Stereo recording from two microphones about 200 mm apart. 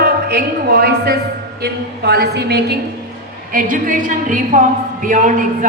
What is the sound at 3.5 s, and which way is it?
A woman's voice, 40° right (ahead or behind).